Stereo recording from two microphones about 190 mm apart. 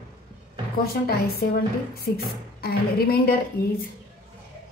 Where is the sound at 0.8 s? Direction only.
55° left (ahead or behind).